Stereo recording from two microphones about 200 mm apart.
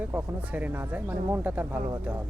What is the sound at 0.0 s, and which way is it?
Speech, 10° right (ahead or behind).